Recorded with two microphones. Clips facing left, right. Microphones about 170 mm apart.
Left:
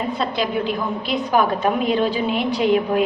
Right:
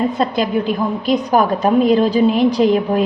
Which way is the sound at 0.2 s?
45° right (ahead or behind).